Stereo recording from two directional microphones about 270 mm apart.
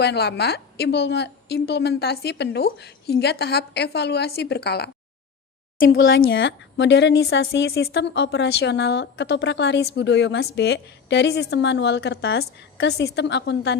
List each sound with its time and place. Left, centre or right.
0.0 s a woman's voice: left